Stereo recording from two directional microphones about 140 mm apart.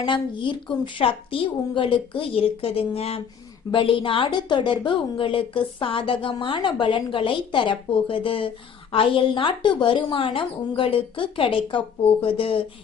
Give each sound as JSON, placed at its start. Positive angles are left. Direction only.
{"t": 0.0, "sound": "a woman's voice", "side_deg": 35}